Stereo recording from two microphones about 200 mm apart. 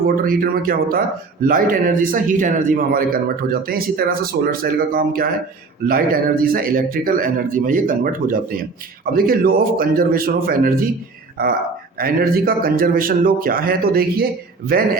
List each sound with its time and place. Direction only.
0.0 s speech: 45° right (ahead or behind)
11.9 s speech: 45° right (ahead or behind)